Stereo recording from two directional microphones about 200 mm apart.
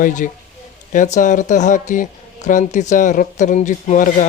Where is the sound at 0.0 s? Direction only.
40° left (ahead or behind).